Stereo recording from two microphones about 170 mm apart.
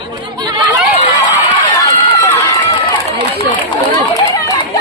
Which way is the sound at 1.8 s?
20° left (ahead or behind).